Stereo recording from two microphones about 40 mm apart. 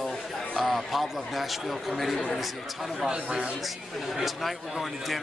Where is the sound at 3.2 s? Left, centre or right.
Right.